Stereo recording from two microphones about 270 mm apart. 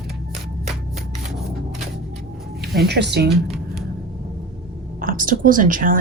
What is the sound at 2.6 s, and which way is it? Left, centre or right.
Speech, right.